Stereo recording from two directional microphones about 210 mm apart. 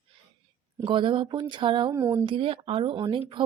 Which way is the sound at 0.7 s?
25° right (ahead or behind).